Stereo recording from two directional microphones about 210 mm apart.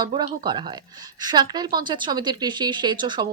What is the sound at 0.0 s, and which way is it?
A woman's voice, 20° right (ahead or behind).